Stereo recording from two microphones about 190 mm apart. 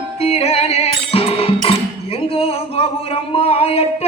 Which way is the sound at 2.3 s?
30° left (ahead or behind).